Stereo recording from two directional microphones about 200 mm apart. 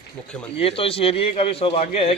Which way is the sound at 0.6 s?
30° left (ahead or behind).